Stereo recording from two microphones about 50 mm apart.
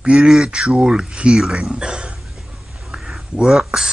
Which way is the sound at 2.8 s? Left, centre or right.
Centre.